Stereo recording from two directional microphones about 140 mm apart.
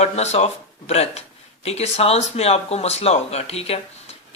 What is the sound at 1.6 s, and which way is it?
Speech, 50° left (ahead or behind).